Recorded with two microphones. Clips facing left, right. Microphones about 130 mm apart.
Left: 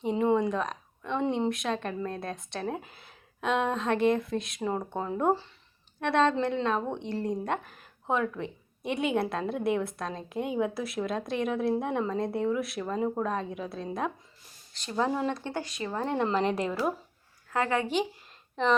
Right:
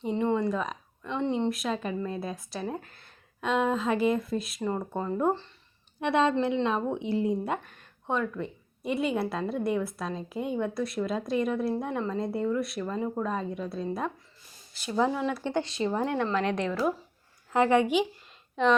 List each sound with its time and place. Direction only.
0.0 s a woman's voice: 5° left (ahead or behind)
6.0 s speech: 10° right (ahead or behind)
7.6 s a woman's voice: 5° left (ahead or behind)
15.4 s speech: 25° right (ahead or behind)
16.2 s speech: 5° left (ahead or behind)
17.5 s speech: 20° right (ahead or behind)
18.5 s speech: centre (ahead or behind)